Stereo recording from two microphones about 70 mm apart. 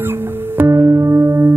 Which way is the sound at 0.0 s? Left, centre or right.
Right.